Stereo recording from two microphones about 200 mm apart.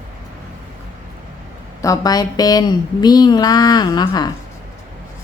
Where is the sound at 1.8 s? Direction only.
15° left (ahead or behind).